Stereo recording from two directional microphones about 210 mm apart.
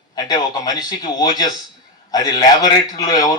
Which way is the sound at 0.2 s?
20° left (ahead or behind).